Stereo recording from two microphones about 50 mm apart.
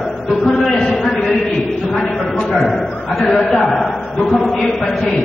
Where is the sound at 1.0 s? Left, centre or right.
Centre.